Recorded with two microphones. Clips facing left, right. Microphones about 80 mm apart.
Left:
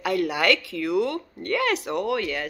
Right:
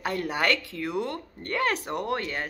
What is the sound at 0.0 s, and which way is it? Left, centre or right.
Speech, right.